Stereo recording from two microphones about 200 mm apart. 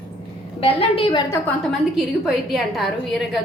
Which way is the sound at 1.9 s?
Centre (ahead or behind).